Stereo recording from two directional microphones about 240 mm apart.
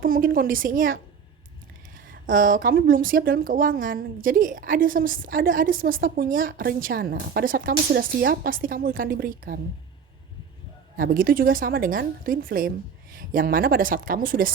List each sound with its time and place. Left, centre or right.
0.0 s a woman's voice: right
2.2 s a woman's voice: right
10.9 s a woman's voice: right